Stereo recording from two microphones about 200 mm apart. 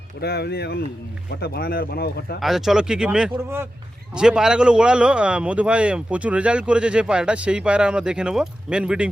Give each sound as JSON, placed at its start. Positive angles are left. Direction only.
{"t": 0.2, "sound": "speech", "side_deg": 55}
{"t": 2.4, "sound": "speech", "side_deg": 0}